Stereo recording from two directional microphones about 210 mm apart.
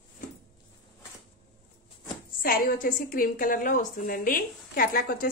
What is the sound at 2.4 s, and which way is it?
A woman's voice, 45° left (ahead or behind).